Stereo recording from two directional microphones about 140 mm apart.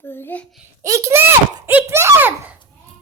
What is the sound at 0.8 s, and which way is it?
A child's voice, 20° right (ahead or behind).